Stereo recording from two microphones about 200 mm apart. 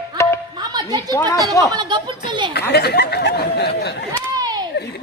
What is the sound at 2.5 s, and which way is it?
Speech, 55° left (ahead or behind).